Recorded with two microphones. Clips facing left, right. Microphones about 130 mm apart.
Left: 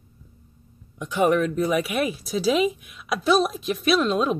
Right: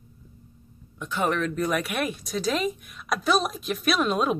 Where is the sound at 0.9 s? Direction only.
15° left (ahead or behind).